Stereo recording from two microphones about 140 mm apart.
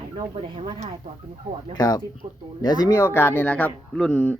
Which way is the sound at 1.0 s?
50° right (ahead or behind).